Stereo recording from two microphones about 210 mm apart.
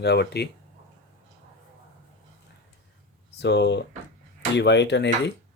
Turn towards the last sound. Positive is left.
turn(degrees=55)  # may be behind; listen again after turning